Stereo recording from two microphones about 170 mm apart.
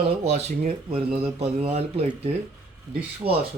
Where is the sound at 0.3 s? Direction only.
40° right (ahead or behind).